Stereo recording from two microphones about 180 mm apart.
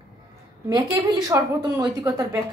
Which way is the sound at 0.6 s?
20° right (ahead or behind).